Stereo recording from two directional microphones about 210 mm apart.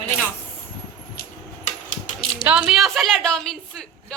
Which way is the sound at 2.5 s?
5° right (ahead or behind).